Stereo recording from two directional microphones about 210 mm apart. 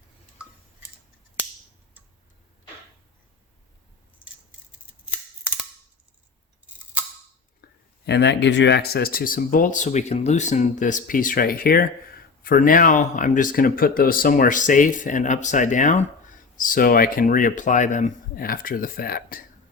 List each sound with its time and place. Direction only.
7.6 s speech: 55° left (ahead or behind)